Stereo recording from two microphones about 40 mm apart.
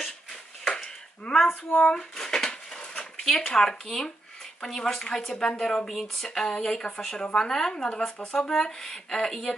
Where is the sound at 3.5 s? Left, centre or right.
Centre.